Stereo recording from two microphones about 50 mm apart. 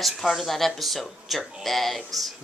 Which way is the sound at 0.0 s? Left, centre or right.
Centre.